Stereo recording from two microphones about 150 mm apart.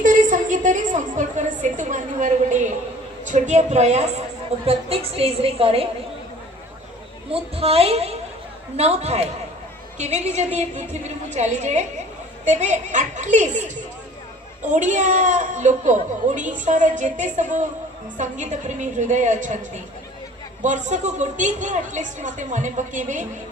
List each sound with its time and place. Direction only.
0.0 s a woman's voice: 60° right (ahead or behind); by 5.9 s 40° right (ahead or behind)
7.3 s a woman's voice: 40° right (ahead or behind)
14.6 s a woman's voice: 55° right (ahead or behind)